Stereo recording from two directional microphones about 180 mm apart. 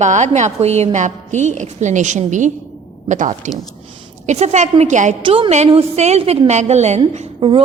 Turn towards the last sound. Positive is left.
turn(degrees=-30)  # may be behind; listen again after turning